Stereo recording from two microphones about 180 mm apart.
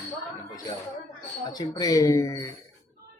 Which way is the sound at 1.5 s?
20° left (ahead or behind).